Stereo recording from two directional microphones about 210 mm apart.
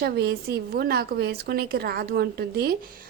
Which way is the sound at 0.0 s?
50° right (ahead or behind).